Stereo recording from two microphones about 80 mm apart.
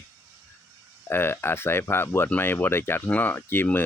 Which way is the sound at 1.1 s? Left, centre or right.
Left.